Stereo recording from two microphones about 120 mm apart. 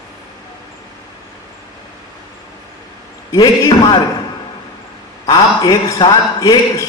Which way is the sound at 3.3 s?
30° left (ahead or behind).